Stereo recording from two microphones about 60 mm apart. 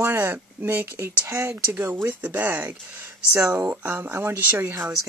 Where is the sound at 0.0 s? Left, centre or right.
Right.